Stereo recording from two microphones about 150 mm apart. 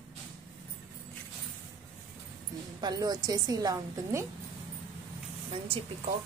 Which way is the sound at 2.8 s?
25° right (ahead or behind).